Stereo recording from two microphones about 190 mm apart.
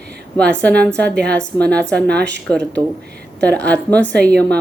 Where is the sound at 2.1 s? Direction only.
60° right (ahead or behind).